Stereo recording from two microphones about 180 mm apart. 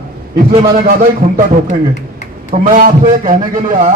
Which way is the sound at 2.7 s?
50° right (ahead or behind).